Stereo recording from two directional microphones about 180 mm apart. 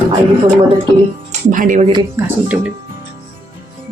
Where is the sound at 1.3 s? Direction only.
45° right (ahead or behind).